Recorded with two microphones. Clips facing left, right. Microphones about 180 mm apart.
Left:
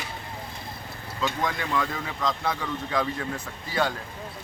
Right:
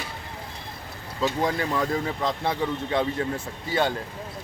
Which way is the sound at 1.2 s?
35° right (ahead or behind).